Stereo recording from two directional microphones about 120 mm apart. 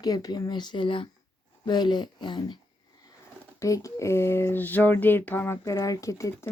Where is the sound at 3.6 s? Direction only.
25° left (ahead or behind).